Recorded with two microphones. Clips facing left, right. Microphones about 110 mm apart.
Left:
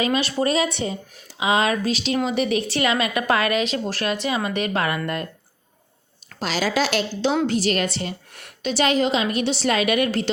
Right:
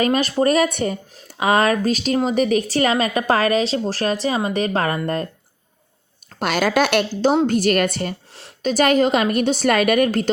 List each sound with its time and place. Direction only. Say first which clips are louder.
0.0 s a woman's voice: right 4 dB; 45° right (ahead or behind)
6.4 s a woman's voice: right 4 dB; 55° right (ahead or behind)
8.3 s a sound: right 2 dB; 30° right (ahead or behind)
8.6 s a woman's voice: right 4 dB; 50° right (ahead or behind)